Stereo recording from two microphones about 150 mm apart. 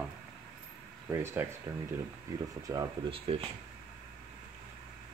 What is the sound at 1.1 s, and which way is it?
Speech, 15° right (ahead or behind).